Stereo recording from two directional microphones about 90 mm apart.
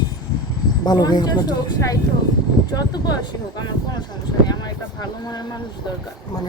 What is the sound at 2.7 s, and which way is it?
Speech, 50° left (ahead or behind).